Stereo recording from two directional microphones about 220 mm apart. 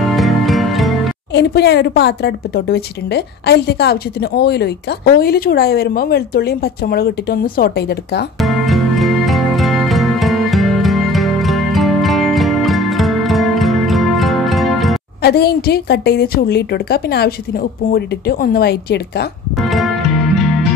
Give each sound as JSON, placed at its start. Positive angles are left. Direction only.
{"t": 0.0, "sound": "music", "side_deg": 0}
{"t": 1.3, "sound": "a woman's voice", "side_deg": 50}
{"t": 8.4, "sound": "music", "side_deg": 0}
{"t": 15.2, "sound": "a woman's voice", "side_deg": 45}
{"t": 19.6, "sound": "music", "side_deg": 0}